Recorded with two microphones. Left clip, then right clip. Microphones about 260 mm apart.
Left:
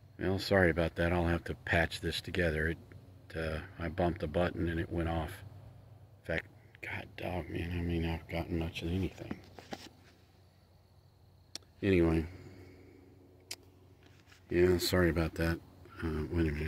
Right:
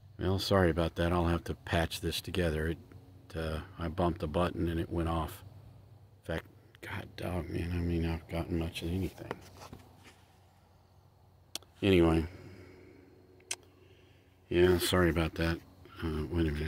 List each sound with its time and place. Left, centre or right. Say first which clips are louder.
0.2 s speech: even; centre
6.8 s speech: left 1 dB; centre
11.5 s a sound: right 3 dB; centre
14.5 s speech: right 2 dB; centre